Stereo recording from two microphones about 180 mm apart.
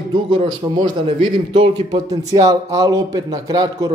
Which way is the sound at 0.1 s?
25° right (ahead or behind).